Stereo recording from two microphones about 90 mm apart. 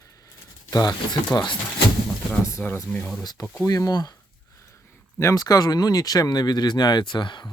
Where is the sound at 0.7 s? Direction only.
45° left (ahead or behind).